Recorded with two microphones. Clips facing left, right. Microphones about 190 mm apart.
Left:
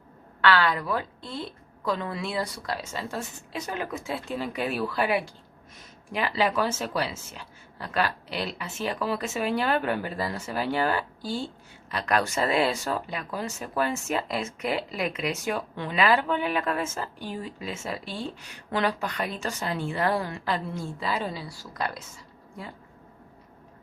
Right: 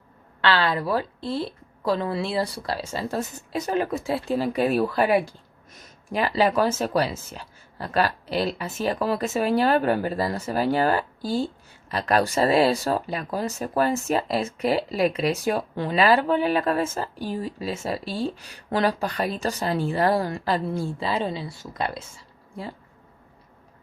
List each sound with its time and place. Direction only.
0.4 s speech: 30° right (ahead or behind)